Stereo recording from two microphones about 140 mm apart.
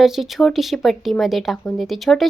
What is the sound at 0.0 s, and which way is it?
Speech, centre (ahead or behind).